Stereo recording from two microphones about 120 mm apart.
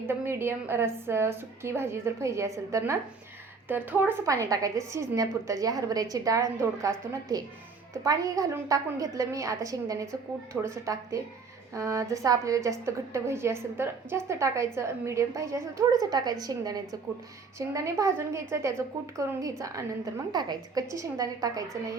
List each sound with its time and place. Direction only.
0.1 s a woman's voice: 20° right (ahead or behind)
4.3 s a woman's voice: 25° right (ahead or behind)